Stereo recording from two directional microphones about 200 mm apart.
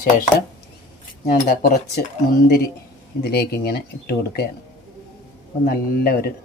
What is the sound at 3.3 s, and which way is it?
A man's voice, 50° left (ahead or behind).